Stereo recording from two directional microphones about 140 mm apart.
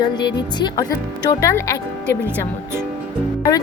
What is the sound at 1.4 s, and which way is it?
Speech, 20° left (ahead or behind).